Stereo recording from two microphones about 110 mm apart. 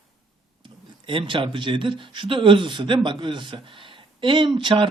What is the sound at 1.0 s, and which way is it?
Speech, 50° right (ahead or behind).